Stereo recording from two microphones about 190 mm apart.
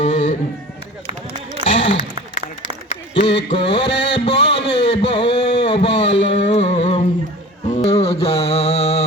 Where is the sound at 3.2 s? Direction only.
65° left (ahead or behind).